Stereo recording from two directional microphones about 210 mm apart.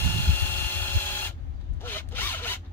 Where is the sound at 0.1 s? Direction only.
10° left (ahead or behind).